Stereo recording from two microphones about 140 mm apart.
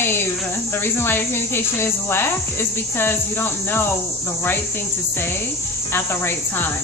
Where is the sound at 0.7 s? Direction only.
15° left (ahead or behind).